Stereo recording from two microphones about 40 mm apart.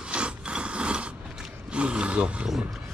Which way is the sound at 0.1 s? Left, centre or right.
Right.